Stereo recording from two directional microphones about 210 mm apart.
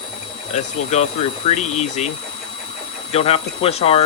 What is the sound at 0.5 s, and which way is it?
Speech, 35° left (ahead or behind).